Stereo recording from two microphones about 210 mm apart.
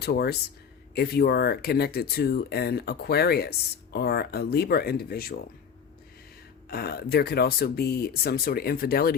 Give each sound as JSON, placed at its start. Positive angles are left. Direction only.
{"t": 0.0, "sound": "speech", "side_deg": 50}
{"t": 6.7, "sound": "speech", "side_deg": 50}